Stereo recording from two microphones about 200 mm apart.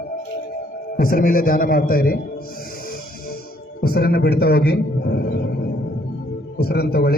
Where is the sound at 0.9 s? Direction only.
45° left (ahead or behind).